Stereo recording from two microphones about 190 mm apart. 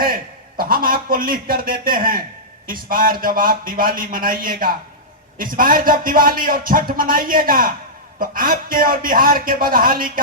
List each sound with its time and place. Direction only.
0.0 s a man's voice: 50° right (ahead or behind)